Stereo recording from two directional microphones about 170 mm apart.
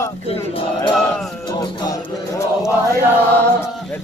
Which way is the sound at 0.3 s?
35° left (ahead or behind).